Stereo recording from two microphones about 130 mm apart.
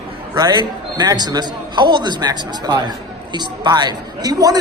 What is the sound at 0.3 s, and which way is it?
A man's voice, 30° right (ahead or behind).